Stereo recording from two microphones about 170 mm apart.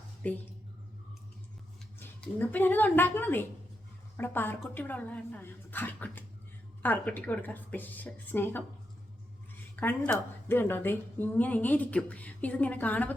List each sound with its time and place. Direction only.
0.2 s a woman's voice: 10° left (ahead or behind)
2.0 s a woman's voice: 10° left (ahead or behind)
9.8 s a woman's voice: 10° left (ahead or behind)